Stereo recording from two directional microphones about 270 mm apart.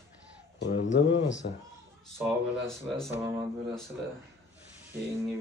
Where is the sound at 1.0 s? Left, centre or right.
Left.